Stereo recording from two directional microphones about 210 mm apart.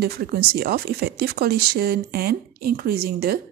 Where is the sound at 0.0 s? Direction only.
45° right (ahead or behind).